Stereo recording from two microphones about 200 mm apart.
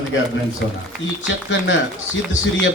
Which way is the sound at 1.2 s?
65° left (ahead or behind).